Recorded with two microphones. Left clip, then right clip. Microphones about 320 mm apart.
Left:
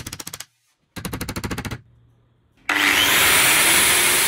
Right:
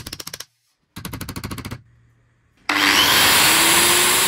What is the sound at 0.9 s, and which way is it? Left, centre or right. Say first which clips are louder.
Machine gun: left 3 dB; left.